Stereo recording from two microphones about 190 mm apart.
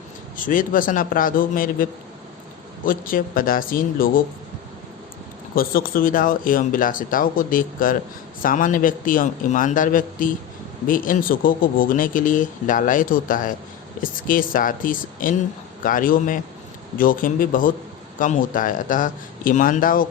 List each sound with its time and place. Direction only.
0.3 s speech: 45° left (ahead or behind)
5.5 s speech: 50° left (ahead or behind)